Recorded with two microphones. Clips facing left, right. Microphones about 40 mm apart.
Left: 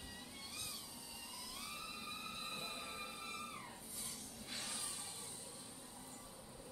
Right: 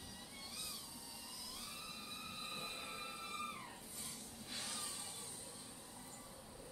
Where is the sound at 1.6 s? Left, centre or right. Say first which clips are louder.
Left 4 dB; centre.